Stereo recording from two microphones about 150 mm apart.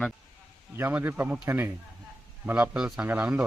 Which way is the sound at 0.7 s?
15° right (ahead or behind).